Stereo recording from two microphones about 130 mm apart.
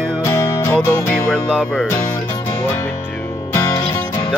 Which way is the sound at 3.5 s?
30° left (ahead or behind).